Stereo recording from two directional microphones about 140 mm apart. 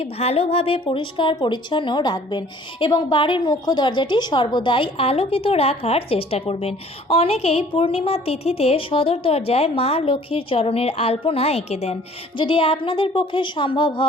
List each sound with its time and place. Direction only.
0.0 s a woman's voice: 45° left (ahead or behind)
12.4 s a woman's voice: 40° left (ahead or behind)